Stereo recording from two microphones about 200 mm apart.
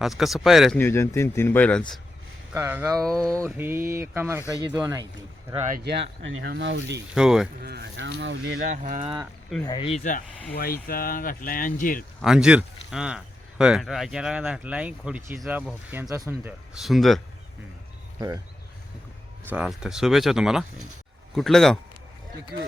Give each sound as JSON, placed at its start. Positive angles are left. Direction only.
{"t": 0.0, "sound": "speech", "side_deg": 0}
{"t": 0.8, "sound": "speech", "side_deg": 10}
{"t": 2.5, "sound": "speech", "side_deg": -10}
{"t": 5.6, "sound": "speech", "side_deg": -50}
{"t": 7.1, "sound": "speech", "side_deg": -5}
{"t": 7.6, "sound": "speech", "side_deg": -55}
{"t": 8.7, "sound": "speech", "side_deg": -35}
{"t": 9.2, "sound": "speech", "side_deg": 0}
{"t": 9.6, "sound": "speech", "side_deg": 25}
{"t": 12.2, "sound": "speech", "side_deg": -5}
{"t": 19.5, "sound": "speech", "side_deg": -5}